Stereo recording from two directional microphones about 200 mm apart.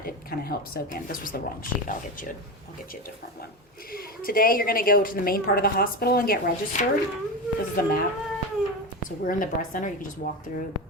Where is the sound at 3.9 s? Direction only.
45° left (ahead or behind).